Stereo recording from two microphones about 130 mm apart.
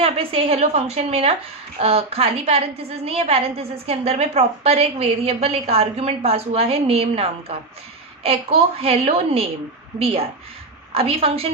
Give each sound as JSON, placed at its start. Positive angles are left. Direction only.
{"t": 0.0, "sound": "a woman's voice", "side_deg": -45}
{"t": 10.9, "sound": "a woman's voice", "side_deg": -50}